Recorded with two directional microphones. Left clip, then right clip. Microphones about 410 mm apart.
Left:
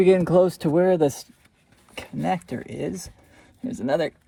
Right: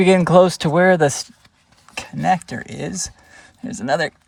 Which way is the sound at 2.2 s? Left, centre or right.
Right.